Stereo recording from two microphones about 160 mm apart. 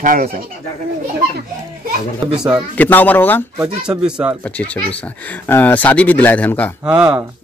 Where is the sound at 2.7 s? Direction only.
10° left (ahead or behind).